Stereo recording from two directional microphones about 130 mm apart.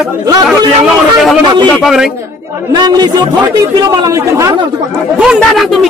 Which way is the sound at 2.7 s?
30° right (ahead or behind).